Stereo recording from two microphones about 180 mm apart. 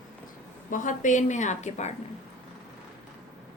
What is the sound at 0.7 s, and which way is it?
A woman's voice, 45° left (ahead or behind).